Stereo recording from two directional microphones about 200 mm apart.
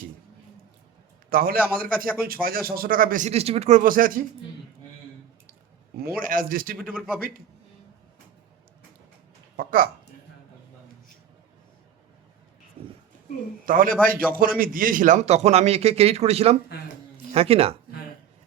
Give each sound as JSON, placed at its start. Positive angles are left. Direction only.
{"t": 1.3, "sound": "speech", "side_deg": -45}
{"t": 6.0, "sound": "speech", "side_deg": -45}
{"t": 6.7, "sound": "speech", "side_deg": -5}
{"t": 7.2, "sound": "speech", "side_deg": -45}
{"t": 9.6, "sound": "a sound", "side_deg": -45}
{"t": 13.7, "sound": "a man's voice", "side_deg": -45}